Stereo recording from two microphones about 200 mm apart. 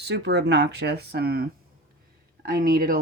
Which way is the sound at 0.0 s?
55° right (ahead or behind).